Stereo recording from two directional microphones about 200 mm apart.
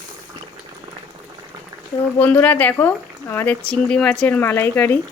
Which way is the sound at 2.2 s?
10° left (ahead or behind).